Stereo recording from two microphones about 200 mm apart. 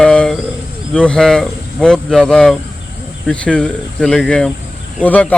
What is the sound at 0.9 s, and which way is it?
Speech, 5° left (ahead or behind).